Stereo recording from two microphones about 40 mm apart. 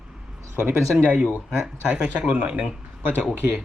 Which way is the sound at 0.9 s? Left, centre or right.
Right.